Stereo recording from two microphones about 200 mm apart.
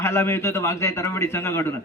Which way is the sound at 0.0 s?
15° left (ahead or behind).